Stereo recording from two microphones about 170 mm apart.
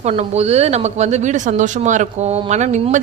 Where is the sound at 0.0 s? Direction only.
40° right (ahead or behind).